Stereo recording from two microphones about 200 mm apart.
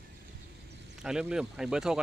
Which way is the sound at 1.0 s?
5° right (ahead or behind).